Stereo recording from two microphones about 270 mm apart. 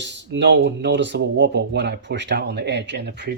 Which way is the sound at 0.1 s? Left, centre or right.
Right.